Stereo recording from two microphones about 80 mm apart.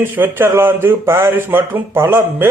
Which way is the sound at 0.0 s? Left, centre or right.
Right.